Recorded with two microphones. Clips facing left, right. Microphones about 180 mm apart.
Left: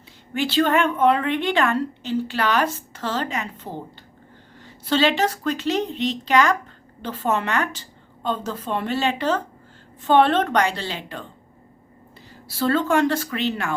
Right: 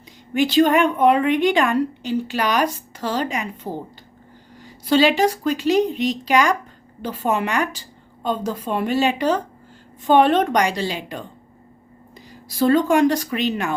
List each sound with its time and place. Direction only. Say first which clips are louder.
0.3 s a woman's voice: right 4 dB; 15° right (ahead or behind)
4.6 s a woman's voice: right 4 dB; 10° right (ahead or behind)
12.3 s a woman's voice: right 5 dB; 15° right (ahead or behind)